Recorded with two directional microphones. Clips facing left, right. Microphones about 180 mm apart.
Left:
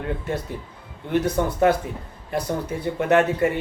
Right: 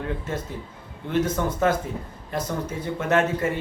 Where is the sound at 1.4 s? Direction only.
15° left (ahead or behind).